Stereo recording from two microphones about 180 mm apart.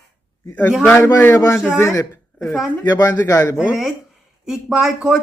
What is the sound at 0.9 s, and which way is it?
A man's voice, 10° left (ahead or behind).